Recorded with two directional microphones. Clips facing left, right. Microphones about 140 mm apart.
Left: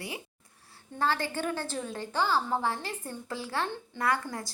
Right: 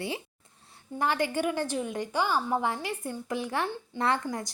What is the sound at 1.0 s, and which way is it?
A woman's voice, 15° right (ahead or behind).